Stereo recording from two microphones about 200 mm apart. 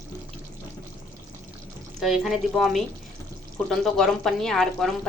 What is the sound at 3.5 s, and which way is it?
Speech, 5° left (ahead or behind).